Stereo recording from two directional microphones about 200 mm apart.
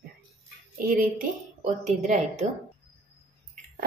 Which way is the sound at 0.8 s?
45° right (ahead or behind).